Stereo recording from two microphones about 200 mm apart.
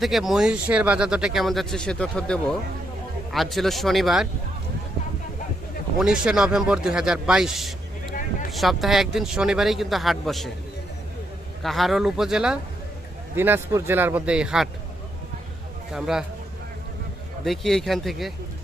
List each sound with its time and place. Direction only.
0.0 s speech: centre (ahead or behind)
6.0 s speech: 5° right (ahead or behind)
8.1 s a sound: 40° left (ahead or behind)
8.4 s speech: centre (ahead or behind)
11.6 s speech: centre (ahead or behind)
15.9 s speech: centre (ahead or behind)
17.4 s speech: centre (ahead or behind)